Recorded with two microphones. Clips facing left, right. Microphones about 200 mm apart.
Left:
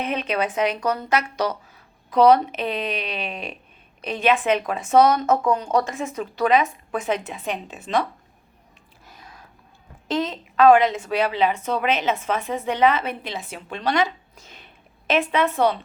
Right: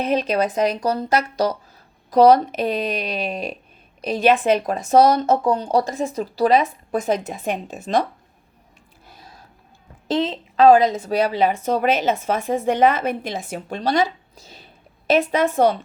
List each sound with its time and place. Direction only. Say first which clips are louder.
0.0 s a woman's voice: right 5 dB; 35° right (ahead or behind)
9.0 s a sound: right 1 dB; 35° right (ahead or behind)
10.1 s a woman's voice: right 3 dB; 30° right (ahead or behind)